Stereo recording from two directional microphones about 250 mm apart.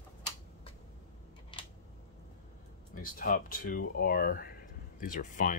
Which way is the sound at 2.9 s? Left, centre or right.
Left.